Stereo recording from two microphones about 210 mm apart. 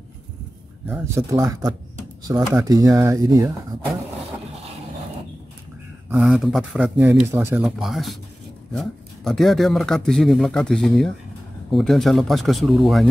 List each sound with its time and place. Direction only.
0.8 s speech: 10° right (ahead or behind)
6.0 s speech: 5° right (ahead or behind)